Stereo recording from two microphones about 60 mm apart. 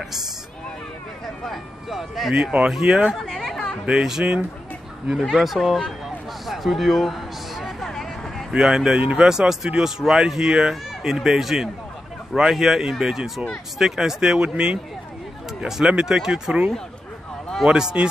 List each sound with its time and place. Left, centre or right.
1.4 s speech: centre
2.3 s speech: centre
3.3 s chatter: centre
3.8 s speech: centre
5.2 s speech: centre
6.4 s a sound: centre
8.5 s speech: centre